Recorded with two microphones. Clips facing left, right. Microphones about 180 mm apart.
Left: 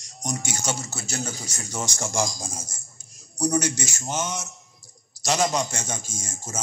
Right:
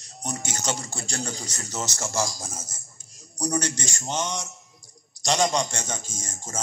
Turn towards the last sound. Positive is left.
turn(degrees=10)  # may be behind; listen again after turning